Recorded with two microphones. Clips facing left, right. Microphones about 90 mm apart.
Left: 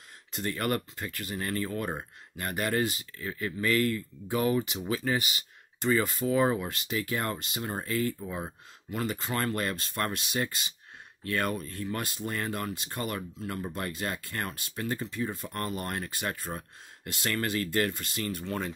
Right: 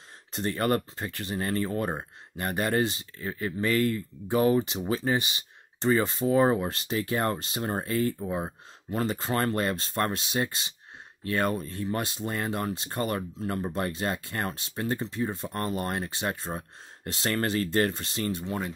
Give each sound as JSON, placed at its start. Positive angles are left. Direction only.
{"t": 0.3, "sound": "speech", "side_deg": -35}
{"t": 8.9, "sound": "speech", "side_deg": -35}